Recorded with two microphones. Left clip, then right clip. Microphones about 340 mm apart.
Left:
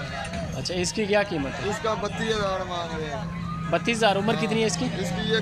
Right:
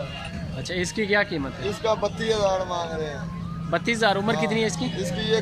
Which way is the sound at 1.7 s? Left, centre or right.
Centre.